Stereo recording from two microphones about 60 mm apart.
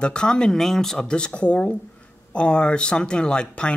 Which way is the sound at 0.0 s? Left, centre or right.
Centre.